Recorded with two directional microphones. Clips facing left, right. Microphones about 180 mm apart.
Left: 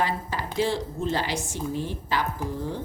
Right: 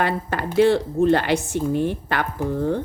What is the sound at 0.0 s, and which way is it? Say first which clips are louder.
Speech: right 5 dB; 60° right (ahead or behind).